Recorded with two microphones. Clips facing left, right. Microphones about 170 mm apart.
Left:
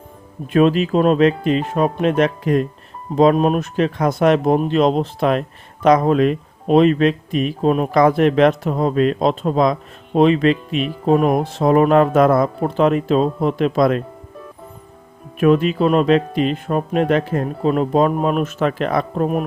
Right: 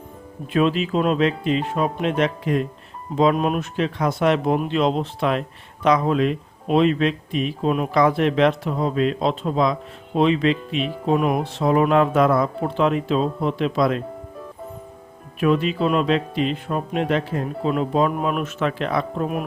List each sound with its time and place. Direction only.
0.5 s speech: 50° left (ahead or behind)
15.4 s speech: 50° left (ahead or behind)